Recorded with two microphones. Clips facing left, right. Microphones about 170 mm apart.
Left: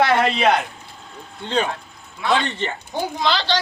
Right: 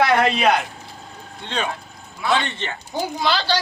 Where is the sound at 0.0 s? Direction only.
Centre (ahead or behind).